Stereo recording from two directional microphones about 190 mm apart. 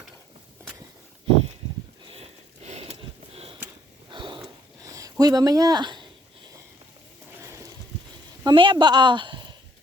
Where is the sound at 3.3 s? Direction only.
30° right (ahead or behind).